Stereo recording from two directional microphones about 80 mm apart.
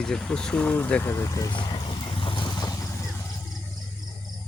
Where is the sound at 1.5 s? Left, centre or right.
Left.